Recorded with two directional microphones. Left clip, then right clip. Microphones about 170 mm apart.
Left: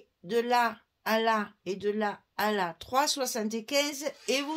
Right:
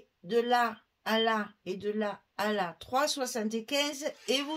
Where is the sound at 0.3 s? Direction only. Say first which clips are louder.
Left 1 dB; 45° left (ahead or behind).